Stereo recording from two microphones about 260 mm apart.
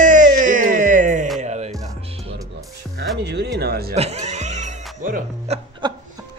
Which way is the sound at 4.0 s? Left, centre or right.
Right.